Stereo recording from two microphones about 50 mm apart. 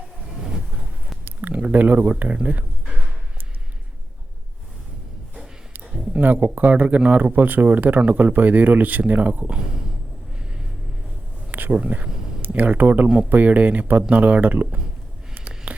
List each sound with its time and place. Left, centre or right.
1.2 s speech: right
6.1 s speech: right
10.3 s vehicle: centre
11.7 s speech: right
15.4 s a sound: right